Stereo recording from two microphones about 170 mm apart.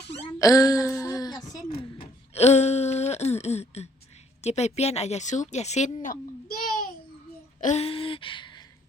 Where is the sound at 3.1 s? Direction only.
40° left (ahead or behind).